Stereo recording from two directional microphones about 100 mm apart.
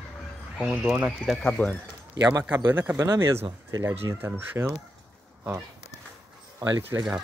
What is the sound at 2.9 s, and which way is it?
Speech, 35° right (ahead or behind).